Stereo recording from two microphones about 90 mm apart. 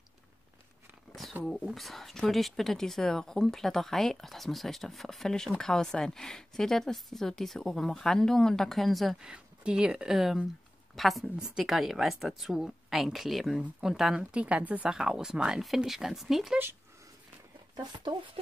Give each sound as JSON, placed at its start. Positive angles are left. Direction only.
{"t": 1.4, "sound": "speech", "side_deg": 0}
{"t": 9.3, "sound": "speech", "side_deg": -10}
{"t": 17.7, "sound": "speech", "side_deg": -60}